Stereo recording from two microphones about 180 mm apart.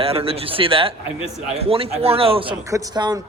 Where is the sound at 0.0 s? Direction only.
30° right (ahead or behind).